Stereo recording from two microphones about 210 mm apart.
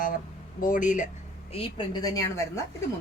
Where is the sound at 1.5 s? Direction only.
25° left (ahead or behind).